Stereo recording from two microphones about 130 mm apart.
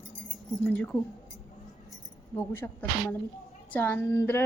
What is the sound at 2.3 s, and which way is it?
A woman's voice, 15° left (ahead or behind).